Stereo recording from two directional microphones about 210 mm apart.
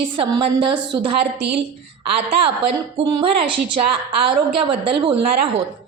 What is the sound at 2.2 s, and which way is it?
A woman's voice, 25° right (ahead or behind).